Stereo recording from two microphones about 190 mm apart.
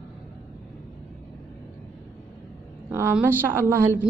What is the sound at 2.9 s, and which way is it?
A woman's voice, 10° right (ahead or behind).